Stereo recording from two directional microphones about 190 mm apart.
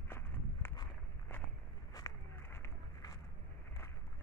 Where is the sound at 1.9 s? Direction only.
15° left (ahead or behind).